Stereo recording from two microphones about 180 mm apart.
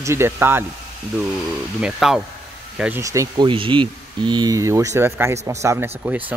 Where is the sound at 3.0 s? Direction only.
20° right (ahead or behind).